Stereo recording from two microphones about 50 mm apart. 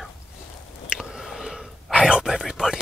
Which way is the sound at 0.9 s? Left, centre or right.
Centre.